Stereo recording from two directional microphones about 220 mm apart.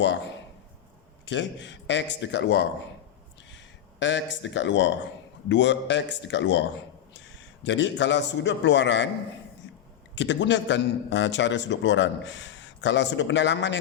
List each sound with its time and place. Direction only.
0.0 s a man's voice: 55° left (ahead or behind)
4.0 s a man's voice: 55° left (ahead or behind)
10.2 s a man's voice: 55° left (ahead or behind)